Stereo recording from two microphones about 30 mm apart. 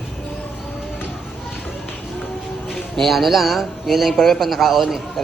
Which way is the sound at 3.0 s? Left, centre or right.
Centre.